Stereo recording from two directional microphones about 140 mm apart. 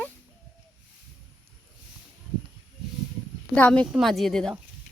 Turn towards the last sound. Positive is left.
turn(degrees=5)  # may be behind; listen again after turning